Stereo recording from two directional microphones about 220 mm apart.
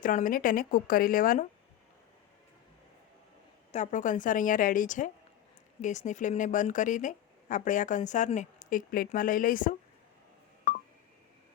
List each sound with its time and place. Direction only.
0.0 s speech: 35° left (ahead or behind)
3.7 s speech: 35° left (ahead or behind)
10.7 s telephone dialing: 45° left (ahead or behind)